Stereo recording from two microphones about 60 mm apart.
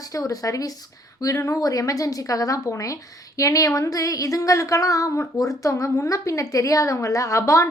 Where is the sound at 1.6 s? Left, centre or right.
Left.